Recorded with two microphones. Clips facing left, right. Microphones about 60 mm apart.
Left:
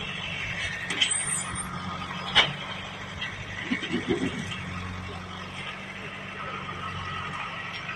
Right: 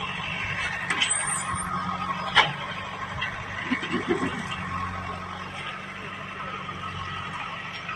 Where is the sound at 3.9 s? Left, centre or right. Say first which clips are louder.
Right 1 dB; right.